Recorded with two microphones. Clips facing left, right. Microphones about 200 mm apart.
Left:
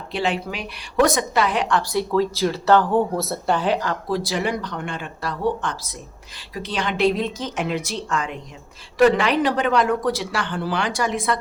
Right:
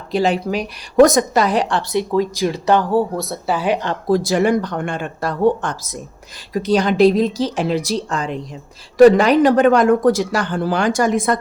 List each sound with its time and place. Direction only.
0.1 s a woman's voice: 40° right (ahead or behind)
1.9 s speech: 20° right (ahead or behind)
4.1 s a woman's voice: 45° right (ahead or behind)